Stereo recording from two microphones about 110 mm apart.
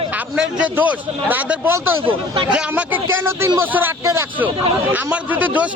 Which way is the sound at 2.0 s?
50° right (ahead or behind).